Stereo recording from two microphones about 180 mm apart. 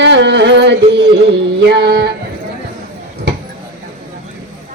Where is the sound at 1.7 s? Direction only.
70° right (ahead or behind).